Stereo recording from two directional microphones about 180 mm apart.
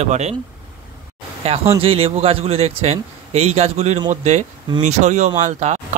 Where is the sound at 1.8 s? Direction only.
30° right (ahead or behind).